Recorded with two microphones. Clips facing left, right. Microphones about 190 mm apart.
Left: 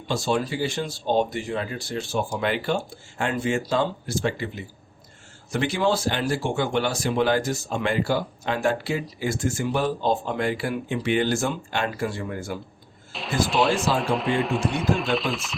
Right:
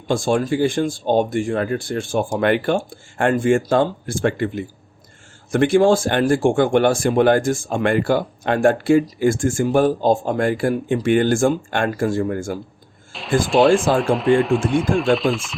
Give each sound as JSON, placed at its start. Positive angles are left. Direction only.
{"t": 0.1, "sound": "speech", "side_deg": -50}
{"t": 13.4, "sound": "speech", "side_deg": 0}